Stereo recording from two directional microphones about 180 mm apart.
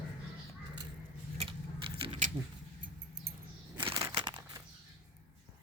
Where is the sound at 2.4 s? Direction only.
25° right (ahead or behind).